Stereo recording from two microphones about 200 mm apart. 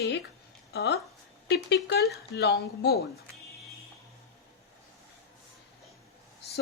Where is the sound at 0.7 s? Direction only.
55° left (ahead or behind).